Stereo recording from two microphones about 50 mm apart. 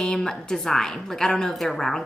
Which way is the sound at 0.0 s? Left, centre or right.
Centre.